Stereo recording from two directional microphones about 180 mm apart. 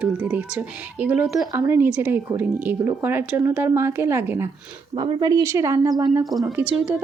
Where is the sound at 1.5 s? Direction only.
15° right (ahead or behind).